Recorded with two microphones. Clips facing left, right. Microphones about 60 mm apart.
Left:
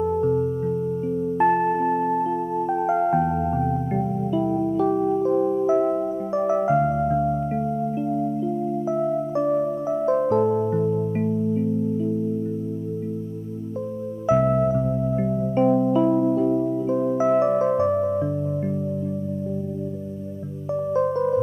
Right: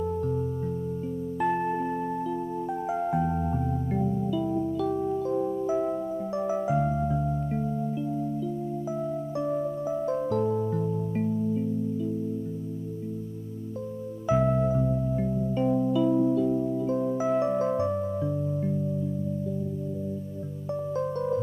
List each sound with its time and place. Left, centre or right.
0.0 s music: left
8.8 s music: left
14.2 s music: centre; by 16.7 s left
16.8 s music: left
20.7 s music: left